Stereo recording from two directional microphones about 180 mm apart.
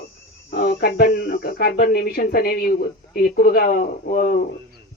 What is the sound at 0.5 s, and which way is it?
Speech, 55° left (ahead or behind).